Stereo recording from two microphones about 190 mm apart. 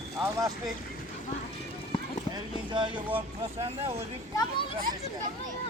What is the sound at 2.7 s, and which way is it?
Speech, 25° right (ahead or behind).